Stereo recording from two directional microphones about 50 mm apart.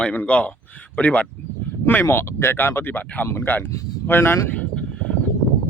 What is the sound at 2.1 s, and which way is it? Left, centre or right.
Speech, left.